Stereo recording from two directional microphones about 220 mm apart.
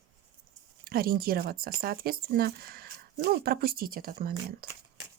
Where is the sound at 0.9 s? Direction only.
40° right (ahead or behind).